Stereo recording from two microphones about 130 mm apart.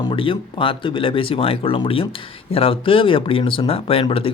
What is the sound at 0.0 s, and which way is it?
Speech, 40° left (ahead or behind).